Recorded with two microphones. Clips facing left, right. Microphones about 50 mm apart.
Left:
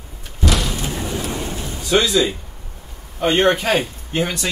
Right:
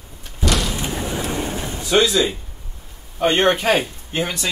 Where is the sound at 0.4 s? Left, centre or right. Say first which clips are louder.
Even; centre.